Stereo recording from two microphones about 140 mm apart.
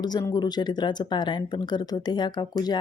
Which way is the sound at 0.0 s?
30° left (ahead or behind).